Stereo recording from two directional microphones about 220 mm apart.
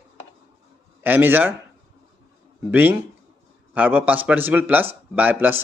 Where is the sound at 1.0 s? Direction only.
10° right (ahead or behind).